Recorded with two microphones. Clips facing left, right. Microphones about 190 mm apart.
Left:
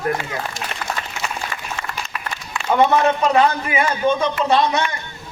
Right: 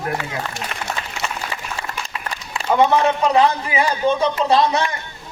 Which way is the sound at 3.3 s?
30° right (ahead or behind).